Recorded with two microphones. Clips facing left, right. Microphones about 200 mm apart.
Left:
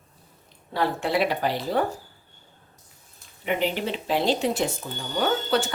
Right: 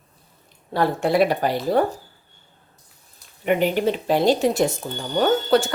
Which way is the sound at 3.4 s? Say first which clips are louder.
Right 6 dB; 50° right (ahead or behind).